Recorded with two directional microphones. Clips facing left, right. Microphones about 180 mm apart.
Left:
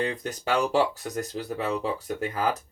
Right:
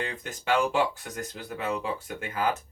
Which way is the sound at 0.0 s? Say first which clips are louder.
Left 5 dB; 40° left (ahead or behind).